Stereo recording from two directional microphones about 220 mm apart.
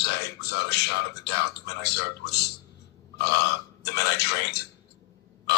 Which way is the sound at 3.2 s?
50° left (ahead or behind).